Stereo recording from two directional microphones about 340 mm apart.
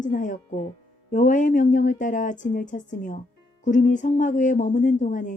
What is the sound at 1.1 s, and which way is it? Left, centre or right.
Speech, left.